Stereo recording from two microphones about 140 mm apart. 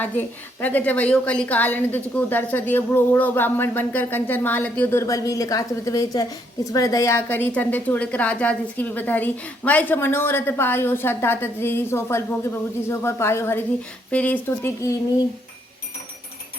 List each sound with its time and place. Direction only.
0.0 s a woman's voice: 10° left (ahead or behind)